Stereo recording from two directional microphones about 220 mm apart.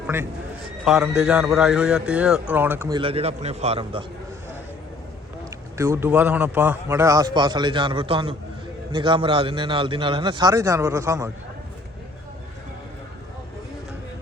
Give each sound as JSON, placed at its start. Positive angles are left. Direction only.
{"t": 0.9, "sound": "speech", "side_deg": -5}
{"t": 3.0, "sound": "a man's voice", "side_deg": -25}
{"t": 5.7, "sound": "a man's voice", "side_deg": -15}